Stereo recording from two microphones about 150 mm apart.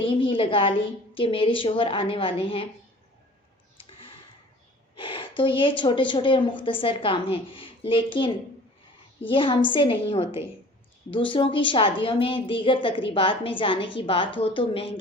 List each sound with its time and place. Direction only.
0.0 s a woman's voice: 35° left (ahead or behind)
3.8 s a sound: 35° left (ahead or behind)
5.4 s a woman's voice: 35° left (ahead or behind)